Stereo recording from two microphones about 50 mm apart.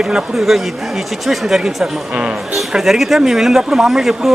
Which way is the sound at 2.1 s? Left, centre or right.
Right.